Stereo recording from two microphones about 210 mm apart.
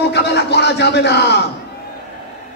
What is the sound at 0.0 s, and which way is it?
Speech, 55° left (ahead or behind).